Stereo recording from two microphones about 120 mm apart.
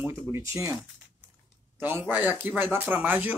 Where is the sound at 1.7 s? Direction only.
20° right (ahead or behind).